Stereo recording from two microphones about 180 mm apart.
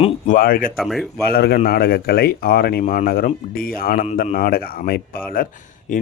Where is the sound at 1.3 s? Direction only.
60° left (ahead or behind).